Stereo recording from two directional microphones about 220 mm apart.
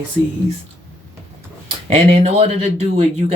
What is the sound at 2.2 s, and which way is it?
Speech, 30° right (ahead or behind).